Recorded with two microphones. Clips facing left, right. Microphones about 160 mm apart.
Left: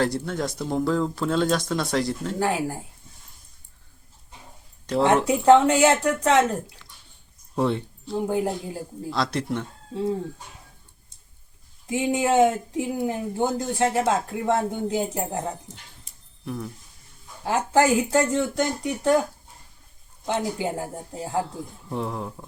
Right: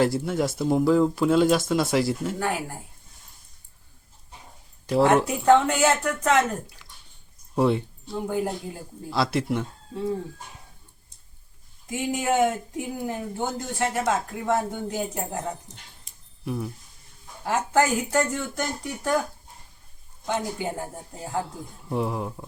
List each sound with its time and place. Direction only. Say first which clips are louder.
0.0 s speech: right 2 dB; 5° right (ahead or behind)
2.4 s speech: left 4 dB; 30° left (ahead or behind)
5.0 s speech: left 3 dB; 25° left (ahead or behind)
7.5 s speech: right 2 dB; 5° right (ahead or behind)
8.1 s speech: left 3 dB; 25° left (ahead or behind)
9.0 s speech: right 2 dB; 5° right (ahead or behind)
11.9 s speech: left 3 dB; 25° left (ahead or behind)
17.4 s speech: left 2 dB; 25° left (ahead or behind)
20.2 s speech: left 2 dB; 25° left (ahead or behind)
21.8 s speech: right 3 dB; 10° right (ahead or behind)